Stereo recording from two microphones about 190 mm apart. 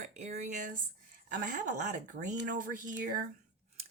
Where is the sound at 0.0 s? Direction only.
40° right (ahead or behind).